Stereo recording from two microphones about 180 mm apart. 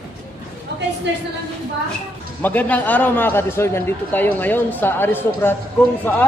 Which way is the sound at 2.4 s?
10° left (ahead or behind).